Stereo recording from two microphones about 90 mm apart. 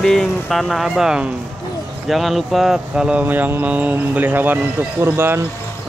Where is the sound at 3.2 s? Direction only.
20° right (ahead or behind).